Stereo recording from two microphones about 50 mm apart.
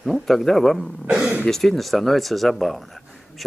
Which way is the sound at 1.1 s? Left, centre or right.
Centre.